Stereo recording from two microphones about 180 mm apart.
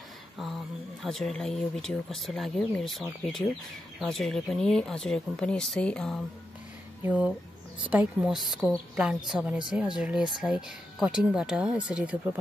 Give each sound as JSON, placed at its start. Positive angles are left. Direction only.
{"t": 1.0, "sound": "speech", "side_deg": 0}
{"t": 7.0, "sound": "speech", "side_deg": -5}